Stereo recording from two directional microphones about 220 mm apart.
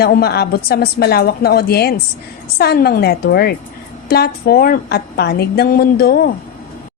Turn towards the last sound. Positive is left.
turn(degrees=45)  # may be behind; listen again after turning